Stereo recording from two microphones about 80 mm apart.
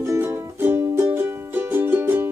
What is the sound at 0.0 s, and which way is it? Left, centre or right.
Music, right.